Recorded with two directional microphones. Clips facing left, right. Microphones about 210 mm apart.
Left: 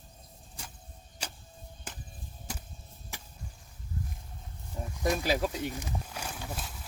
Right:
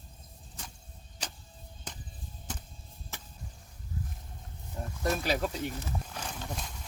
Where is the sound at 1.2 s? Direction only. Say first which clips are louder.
Even; 10° left (ahead or behind).